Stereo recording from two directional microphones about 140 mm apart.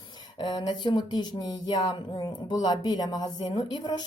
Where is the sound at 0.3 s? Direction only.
30° left (ahead or behind).